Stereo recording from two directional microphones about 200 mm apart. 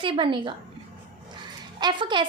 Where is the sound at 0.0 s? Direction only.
25° right (ahead or behind).